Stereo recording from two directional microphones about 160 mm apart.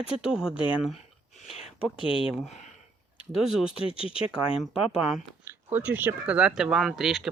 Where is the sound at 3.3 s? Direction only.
Centre (ahead or behind).